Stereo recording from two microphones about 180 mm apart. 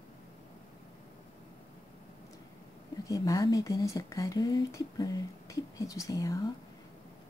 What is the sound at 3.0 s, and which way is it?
Speech, 20° left (ahead or behind).